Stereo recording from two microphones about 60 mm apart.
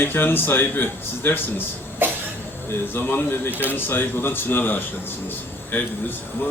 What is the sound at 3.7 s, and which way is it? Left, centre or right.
A man's voice, left.